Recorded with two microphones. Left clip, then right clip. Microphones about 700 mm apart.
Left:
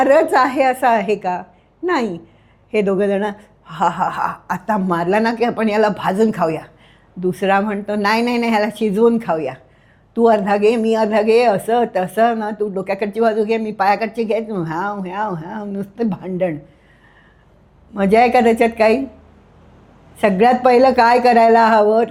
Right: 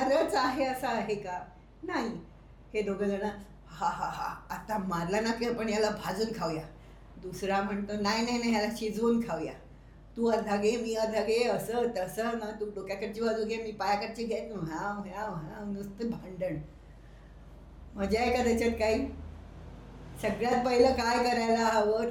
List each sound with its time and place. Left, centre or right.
0.1 s speech: left
2.7 s speech: left
17.9 s speech: left
20.2 s speech: left